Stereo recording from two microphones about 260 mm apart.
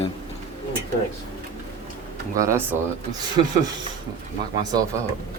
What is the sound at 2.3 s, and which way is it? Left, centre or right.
Speech, centre.